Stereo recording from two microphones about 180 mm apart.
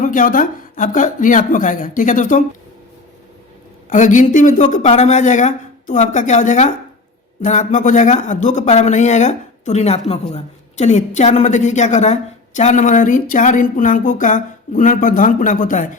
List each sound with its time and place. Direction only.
0.0 s speech: 45° left (ahead or behind)
3.8 s speech: 45° left (ahead or behind)